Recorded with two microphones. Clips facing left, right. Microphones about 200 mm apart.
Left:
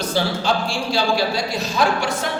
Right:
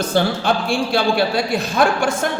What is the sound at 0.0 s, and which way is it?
A man's voice, 55° right (ahead or behind).